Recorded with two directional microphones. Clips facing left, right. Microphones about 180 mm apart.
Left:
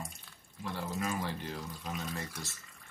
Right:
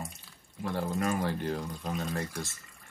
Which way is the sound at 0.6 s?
50° right (ahead or behind).